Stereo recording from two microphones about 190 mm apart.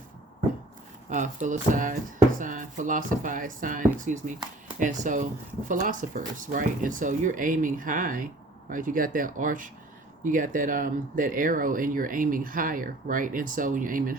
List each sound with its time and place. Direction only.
1.1 s speech: 40° right (ahead or behind)